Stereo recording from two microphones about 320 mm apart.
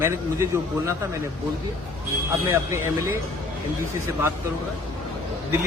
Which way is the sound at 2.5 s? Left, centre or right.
Centre.